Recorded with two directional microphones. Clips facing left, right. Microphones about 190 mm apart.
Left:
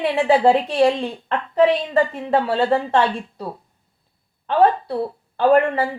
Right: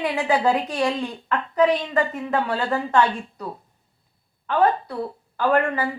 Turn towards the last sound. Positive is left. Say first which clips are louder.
# left 5 dB
turn(degrees=30)  # may be behind; listen again after turning